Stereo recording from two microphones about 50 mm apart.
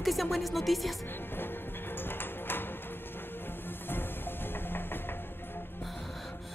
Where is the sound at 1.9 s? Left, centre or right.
Left.